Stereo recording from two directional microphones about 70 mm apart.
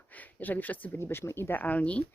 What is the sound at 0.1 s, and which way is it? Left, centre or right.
Speech, left.